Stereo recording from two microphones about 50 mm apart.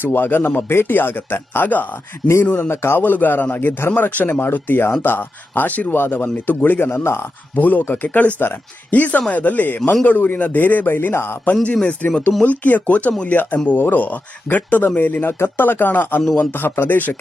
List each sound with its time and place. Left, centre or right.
0.0 s a man's voice: left
2.6 s speech: left
3.0 s speech: left
3.9 s a man's voice: left
5.6 s speech: left
7.0 s speech: left
7.5 s speech: left
9.9 s speech: left
10.2 s speech: left
11.1 s speech: left
11.6 s a man's voice: left